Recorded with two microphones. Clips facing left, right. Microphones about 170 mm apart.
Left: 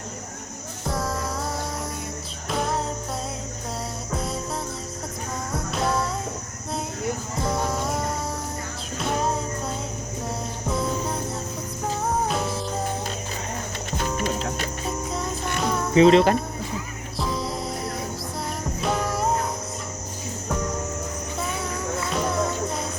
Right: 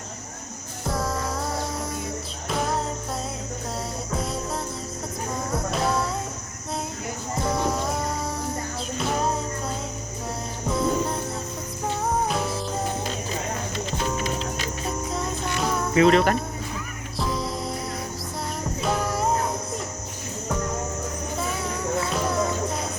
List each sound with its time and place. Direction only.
0.9 s music: centre (ahead or behind)
2.5 s music: centre (ahead or behind)
4.1 s music: centre (ahead or behind)
5.7 s music: centre (ahead or behind)
7.4 s music: centre (ahead or behind)
14.8 s music: centre (ahead or behind)
16.0 s cricket: 25° left (ahead or behind)
17.2 s music: centre (ahead or behind)
18.8 s music: centre (ahead or behind)
22.1 s music: centre (ahead or behind)